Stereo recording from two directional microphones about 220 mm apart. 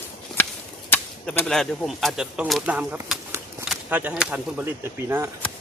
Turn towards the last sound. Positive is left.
turn(degrees=-10)  # may be behind; listen again after turning